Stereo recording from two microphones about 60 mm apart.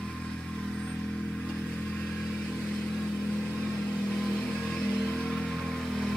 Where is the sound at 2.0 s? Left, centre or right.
Centre.